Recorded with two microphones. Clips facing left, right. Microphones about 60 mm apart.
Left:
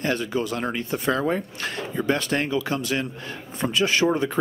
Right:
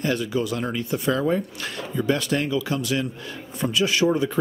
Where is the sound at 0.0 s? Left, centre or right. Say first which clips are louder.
Right 1 dB; left.